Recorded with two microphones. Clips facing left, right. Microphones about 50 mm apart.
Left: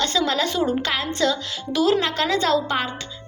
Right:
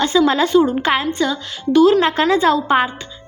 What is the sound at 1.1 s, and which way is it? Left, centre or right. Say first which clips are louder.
Speech: right 2 dB; centre.